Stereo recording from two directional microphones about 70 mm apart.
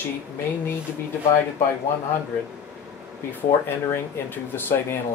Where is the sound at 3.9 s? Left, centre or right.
Left.